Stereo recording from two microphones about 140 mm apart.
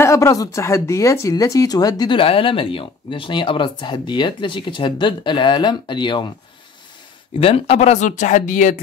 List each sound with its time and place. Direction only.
0.0 s speech: 20° left (ahead or behind)
7.3 s speech: 45° left (ahead or behind); by 8.8 s 65° left (ahead or behind)